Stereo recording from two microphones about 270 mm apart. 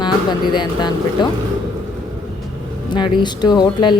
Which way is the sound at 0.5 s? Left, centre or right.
Centre.